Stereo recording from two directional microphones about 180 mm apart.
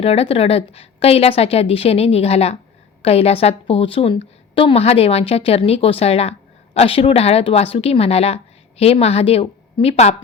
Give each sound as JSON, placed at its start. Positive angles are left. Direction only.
{"t": 0.0, "sound": "a woman's voice", "side_deg": 35}